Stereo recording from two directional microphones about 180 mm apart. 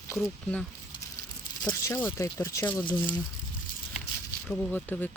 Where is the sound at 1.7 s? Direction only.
15° left (ahead or behind).